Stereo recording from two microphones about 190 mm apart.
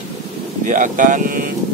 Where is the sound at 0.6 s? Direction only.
45° right (ahead or behind).